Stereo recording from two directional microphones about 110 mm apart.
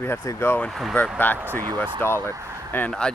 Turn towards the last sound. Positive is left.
turn(degrees=5)  # may be behind; listen again after turning